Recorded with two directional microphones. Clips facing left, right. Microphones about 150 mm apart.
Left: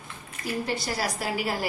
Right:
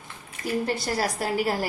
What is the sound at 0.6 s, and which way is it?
A woman's voice, 45° right (ahead or behind).